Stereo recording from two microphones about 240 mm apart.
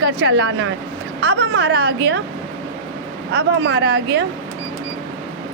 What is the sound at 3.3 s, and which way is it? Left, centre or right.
Speech, right.